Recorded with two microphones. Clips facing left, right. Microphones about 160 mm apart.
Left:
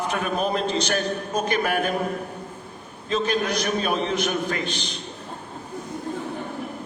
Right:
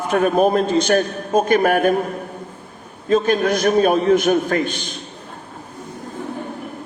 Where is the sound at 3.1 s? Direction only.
50° right (ahead or behind).